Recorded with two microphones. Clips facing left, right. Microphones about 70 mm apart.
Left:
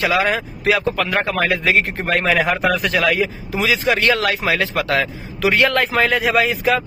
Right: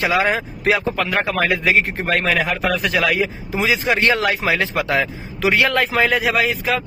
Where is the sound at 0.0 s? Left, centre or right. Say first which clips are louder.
Even; right.